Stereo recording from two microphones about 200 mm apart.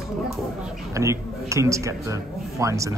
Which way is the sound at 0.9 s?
15° right (ahead or behind).